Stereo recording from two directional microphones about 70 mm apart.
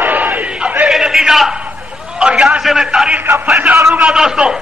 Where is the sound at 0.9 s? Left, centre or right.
Centre.